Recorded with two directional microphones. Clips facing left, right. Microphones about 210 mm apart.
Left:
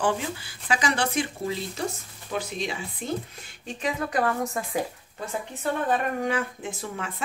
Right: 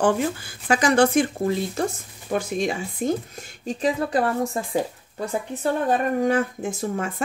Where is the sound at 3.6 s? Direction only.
30° right (ahead or behind).